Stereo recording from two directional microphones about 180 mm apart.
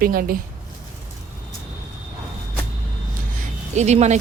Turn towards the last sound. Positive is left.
turn(degrees=-40)  # may be behind; listen again after turning